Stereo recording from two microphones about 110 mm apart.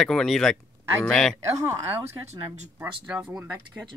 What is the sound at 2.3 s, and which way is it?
Speech, 90° right.